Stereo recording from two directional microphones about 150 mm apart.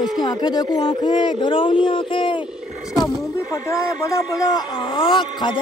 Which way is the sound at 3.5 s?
20° left (ahead or behind).